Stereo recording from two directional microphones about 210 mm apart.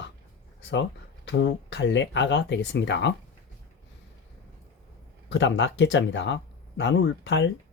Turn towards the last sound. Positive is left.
turn(degrees=60)  # may be behind; listen again after turning